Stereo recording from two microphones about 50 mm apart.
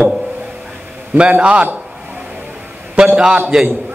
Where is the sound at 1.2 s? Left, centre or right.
Right.